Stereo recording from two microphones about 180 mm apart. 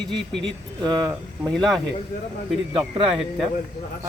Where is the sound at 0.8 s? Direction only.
20° right (ahead or behind).